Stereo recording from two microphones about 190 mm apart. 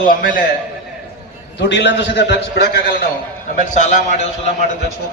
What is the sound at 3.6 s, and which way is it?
Speech, 40° left (ahead or behind).